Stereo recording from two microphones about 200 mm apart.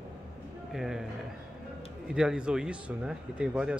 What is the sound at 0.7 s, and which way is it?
Speech, centre (ahead or behind).